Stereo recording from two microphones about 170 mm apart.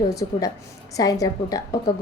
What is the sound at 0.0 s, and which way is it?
A woman's voice, 20° left (ahead or behind).